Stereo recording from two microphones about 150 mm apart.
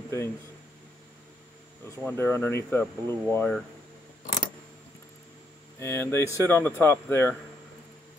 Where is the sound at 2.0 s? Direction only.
15° left (ahead or behind).